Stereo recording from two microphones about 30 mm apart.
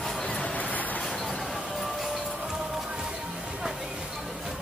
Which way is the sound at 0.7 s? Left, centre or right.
Left.